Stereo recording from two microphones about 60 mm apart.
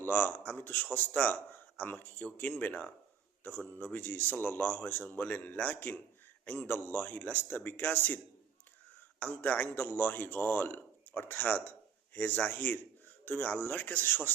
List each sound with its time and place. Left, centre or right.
0.0 s a man's voice: left